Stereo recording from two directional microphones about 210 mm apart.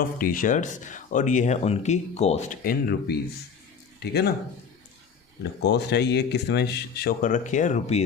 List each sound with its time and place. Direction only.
0.0 s speech: 40° left (ahead or behind)
2.6 s speech: 50° left (ahead or behind)
5.4 s speech: 55° left (ahead or behind); by 8.0 s 35° left (ahead or behind)